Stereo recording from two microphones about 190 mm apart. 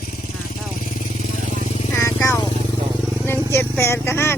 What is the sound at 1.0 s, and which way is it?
Vehicle, 40° left (ahead or behind).